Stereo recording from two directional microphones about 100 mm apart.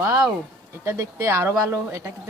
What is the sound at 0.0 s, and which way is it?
Speech, 25° right (ahead or behind).